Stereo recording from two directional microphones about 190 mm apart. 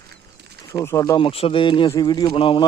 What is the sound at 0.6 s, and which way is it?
Speech, 15° left (ahead or behind).